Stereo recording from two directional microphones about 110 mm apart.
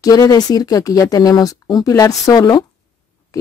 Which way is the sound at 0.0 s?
35° left (ahead or behind).